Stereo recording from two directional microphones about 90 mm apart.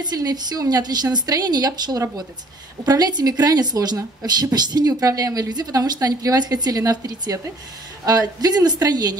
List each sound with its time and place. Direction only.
0.0 s a woman's voice: 50° right (ahead or behind)